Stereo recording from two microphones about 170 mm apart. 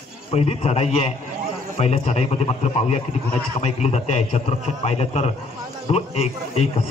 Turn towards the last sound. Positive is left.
turn(degrees=35)  # may be behind; listen again after turning